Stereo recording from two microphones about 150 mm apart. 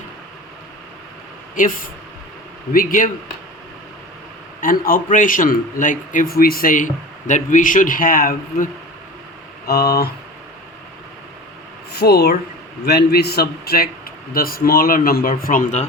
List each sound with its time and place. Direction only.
1.5 s a man's voice: 65° left (ahead or behind)
4.6 s a man's voice: 70° left (ahead or behind)
9.6 s a man's voice: 90° left
11.9 s a man's voice: 90° left; by 15.9 s 55° left (ahead or behind)